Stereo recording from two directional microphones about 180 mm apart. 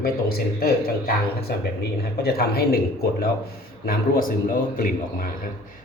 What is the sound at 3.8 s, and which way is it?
Speech, 55° left (ahead or behind).